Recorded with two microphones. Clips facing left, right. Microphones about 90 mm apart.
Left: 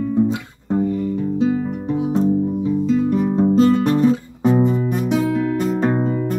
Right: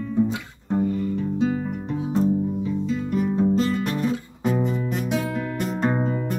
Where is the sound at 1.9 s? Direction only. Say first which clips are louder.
Left 4 dB; 15° left (ahead or behind).